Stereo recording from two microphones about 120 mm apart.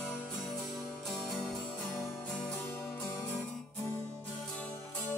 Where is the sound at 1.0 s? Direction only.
Centre (ahead or behind).